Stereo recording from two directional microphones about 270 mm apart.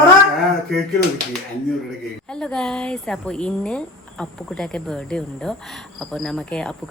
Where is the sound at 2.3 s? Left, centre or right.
Centre.